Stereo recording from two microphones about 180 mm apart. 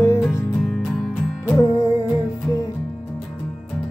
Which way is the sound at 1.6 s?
15° left (ahead or behind).